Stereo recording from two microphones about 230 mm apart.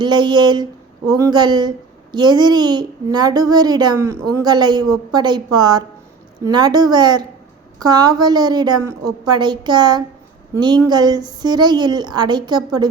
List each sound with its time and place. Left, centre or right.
0.0 s a woman's voice: centre